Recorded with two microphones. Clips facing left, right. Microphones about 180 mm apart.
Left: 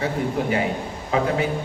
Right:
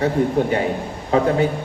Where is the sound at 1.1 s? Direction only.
35° right (ahead or behind).